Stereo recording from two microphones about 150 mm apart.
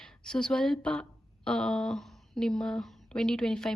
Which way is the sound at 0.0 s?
5° left (ahead or behind).